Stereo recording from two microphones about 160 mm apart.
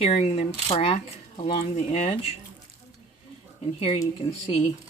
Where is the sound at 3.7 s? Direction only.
35° left (ahead or behind).